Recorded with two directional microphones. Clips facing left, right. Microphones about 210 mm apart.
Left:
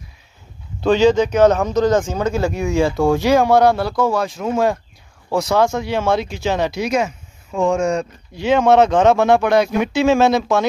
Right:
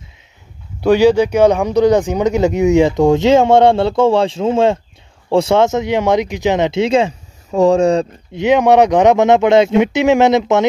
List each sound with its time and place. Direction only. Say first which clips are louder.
0.7 s speech: right 3 dB; 10° right (ahead or behind); by 8.1 s 35° right (ahead or behind)
8.4 s speech: right 3 dB; 15° right (ahead or behind)